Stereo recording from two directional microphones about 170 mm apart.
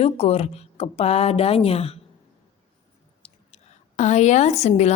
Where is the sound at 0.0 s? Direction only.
35° left (ahead or behind).